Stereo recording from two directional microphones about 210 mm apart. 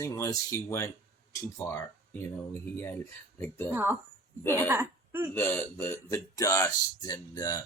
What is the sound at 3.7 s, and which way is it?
Speech, 10° right (ahead or behind).